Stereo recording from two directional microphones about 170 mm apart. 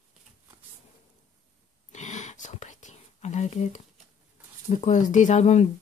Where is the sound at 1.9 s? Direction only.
45° left (ahead or behind).